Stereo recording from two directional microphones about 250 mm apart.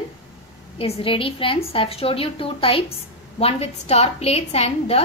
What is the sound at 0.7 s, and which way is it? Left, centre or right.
A woman's voice, left.